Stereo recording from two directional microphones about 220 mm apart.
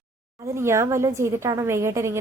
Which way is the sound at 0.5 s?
10° right (ahead or behind).